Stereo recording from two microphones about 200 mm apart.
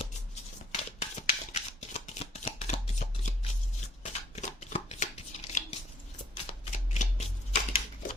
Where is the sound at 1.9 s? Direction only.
30° left (ahead or behind).